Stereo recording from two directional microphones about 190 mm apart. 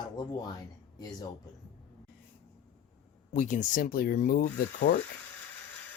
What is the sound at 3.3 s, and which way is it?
Speech, 40° left (ahead or behind).